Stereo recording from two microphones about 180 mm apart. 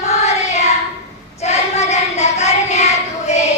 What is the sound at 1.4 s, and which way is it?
Child singing, 40° left (ahead or behind).